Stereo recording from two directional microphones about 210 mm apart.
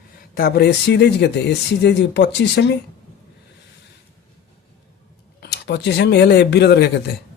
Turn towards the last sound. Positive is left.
turn(degrees=50)  # may be behind; listen again after turning